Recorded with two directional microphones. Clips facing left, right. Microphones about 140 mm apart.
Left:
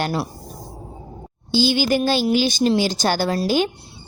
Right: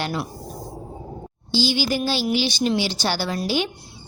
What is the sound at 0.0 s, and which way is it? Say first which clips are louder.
Speech: left 3 dB; 35° left (ahead or behind).